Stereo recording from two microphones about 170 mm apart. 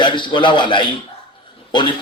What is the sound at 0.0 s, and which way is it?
A man's voice, 25° left (ahead or behind).